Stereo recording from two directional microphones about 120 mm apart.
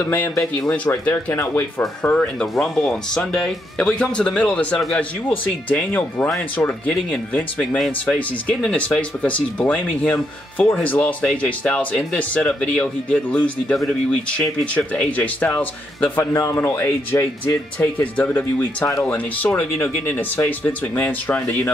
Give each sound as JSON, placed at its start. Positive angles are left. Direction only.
{"t": 0.0, "sound": "speech", "side_deg": 15}
{"t": 17.7, "sound": "speech", "side_deg": 10}